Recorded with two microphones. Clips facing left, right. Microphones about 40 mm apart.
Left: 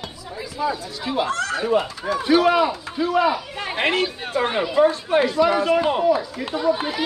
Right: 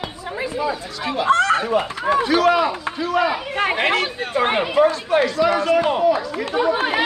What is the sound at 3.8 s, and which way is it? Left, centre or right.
Speech, right.